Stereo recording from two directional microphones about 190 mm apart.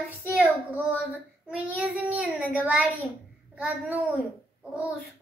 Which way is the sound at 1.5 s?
5° right (ahead or behind).